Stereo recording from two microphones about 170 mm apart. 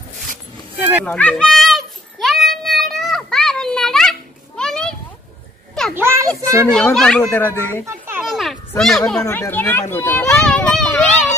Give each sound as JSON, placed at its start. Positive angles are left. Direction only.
{"t": 1.0, "sound": "a sound", "side_deg": 5}
{"t": 5.9, "sound": "children playing", "side_deg": -15}
{"t": 6.4, "sound": "a child's voice", "side_deg": -15}
{"t": 6.7, "sound": "a child's voice", "side_deg": 5}
{"t": 7.8, "sound": "children playing", "side_deg": -10}
{"t": 8.3, "sound": "a sound", "side_deg": 0}
{"t": 9.2, "sound": "a child's voice", "side_deg": 15}